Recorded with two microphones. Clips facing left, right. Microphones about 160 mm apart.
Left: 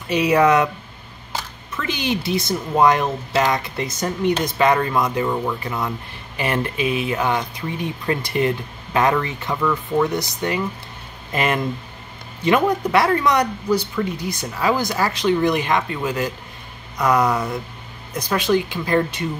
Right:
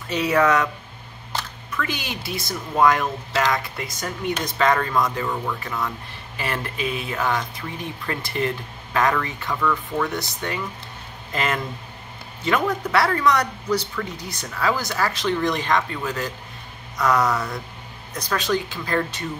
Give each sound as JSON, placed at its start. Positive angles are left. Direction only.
{"t": 0.1, "sound": "speech", "side_deg": 15}
{"t": 4.6, "sound": "speech", "side_deg": 15}